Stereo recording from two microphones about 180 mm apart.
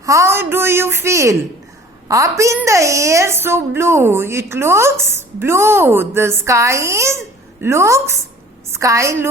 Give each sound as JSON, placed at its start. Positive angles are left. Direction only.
{"t": 0.0, "sound": "a woman's voice", "side_deg": -15}